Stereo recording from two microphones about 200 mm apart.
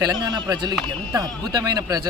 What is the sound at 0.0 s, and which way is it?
A man's voice, 20° right (ahead or behind).